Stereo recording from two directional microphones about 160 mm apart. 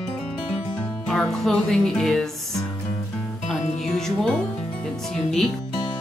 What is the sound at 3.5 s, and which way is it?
Music, 5° left (ahead or behind).